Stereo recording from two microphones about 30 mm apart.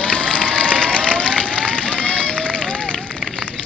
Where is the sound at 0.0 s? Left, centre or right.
Left.